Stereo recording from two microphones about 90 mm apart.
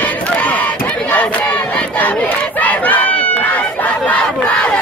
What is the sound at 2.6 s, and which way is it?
Crowd, 15° left (ahead or behind).